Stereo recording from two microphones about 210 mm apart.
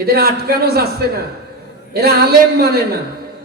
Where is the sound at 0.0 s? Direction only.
45° right (ahead or behind).